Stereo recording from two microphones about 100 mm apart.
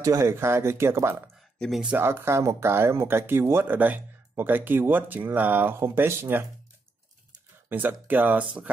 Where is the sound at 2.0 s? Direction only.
25° right (ahead or behind).